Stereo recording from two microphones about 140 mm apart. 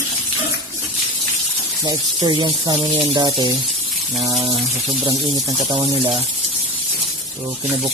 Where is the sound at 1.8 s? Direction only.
30° right (ahead or behind).